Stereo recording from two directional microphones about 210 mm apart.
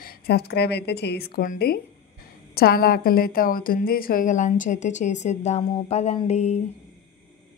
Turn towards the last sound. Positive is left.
turn(degrees=35)  # may be behind; listen again after turning